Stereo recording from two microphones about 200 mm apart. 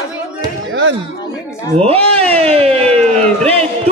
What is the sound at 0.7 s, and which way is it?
Music, 65° right (ahead or behind).